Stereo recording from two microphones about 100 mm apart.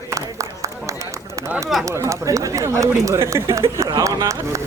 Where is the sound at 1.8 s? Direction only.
30° right (ahead or behind).